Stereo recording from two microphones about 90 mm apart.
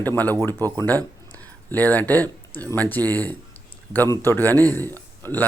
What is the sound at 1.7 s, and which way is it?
Speech, 20° left (ahead or behind).